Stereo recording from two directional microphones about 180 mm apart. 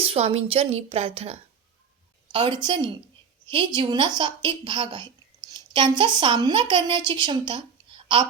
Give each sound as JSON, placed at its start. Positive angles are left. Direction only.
{"t": 0.0, "sound": "a woman's voice", "side_deg": -30}